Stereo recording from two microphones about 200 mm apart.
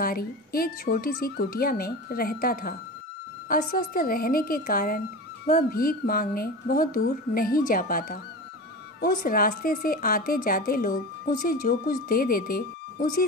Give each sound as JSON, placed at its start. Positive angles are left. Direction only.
{"t": 0.0, "sound": "a woman's voice", "side_deg": 45}